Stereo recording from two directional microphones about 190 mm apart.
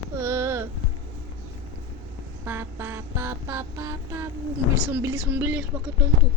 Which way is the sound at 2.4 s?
15° right (ahead or behind).